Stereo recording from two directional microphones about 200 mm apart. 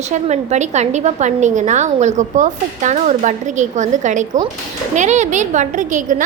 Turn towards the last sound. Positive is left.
turn(degrees=-40)  # may be behind; listen again after turning